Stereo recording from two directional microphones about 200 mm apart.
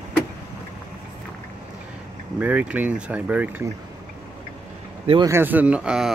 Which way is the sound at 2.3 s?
5° right (ahead or behind).